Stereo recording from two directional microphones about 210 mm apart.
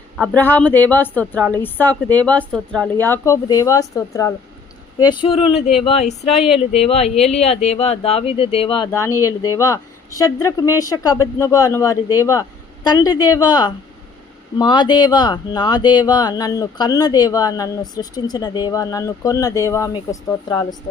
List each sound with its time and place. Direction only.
0.2 s speech: 5° left (ahead or behind); by 6.3 s 30° left (ahead or behind)
6.3 s speech: centre (ahead or behind)
6.6 s speech: 30° left (ahead or behind)